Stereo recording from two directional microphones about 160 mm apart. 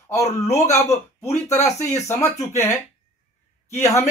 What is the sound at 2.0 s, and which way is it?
A man's voice, 20° left (ahead or behind).